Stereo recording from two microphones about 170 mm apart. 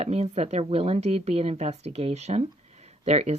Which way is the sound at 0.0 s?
40° right (ahead or behind).